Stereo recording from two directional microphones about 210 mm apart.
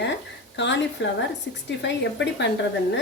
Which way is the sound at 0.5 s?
60° left (ahead or behind).